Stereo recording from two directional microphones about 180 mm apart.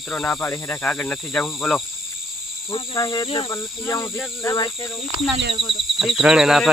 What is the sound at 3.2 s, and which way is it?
Cricket, 30° left (ahead or behind).